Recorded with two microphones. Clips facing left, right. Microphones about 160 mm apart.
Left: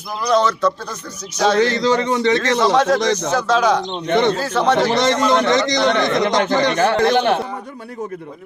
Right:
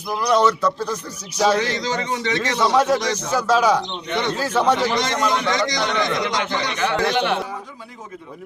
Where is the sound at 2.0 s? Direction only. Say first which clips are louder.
Left 7 dB; 45° left (ahead or behind).